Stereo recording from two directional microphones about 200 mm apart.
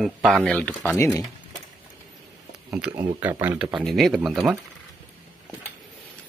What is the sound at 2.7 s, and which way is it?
A man's voice, 10° right (ahead or behind).